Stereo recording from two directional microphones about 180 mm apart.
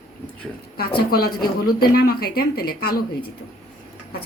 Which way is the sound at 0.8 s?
55° left (ahead or behind).